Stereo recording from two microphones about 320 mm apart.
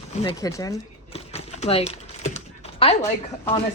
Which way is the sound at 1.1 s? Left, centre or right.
Centre.